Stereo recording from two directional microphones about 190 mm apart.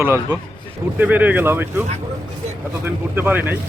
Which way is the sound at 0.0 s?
15° right (ahead or behind).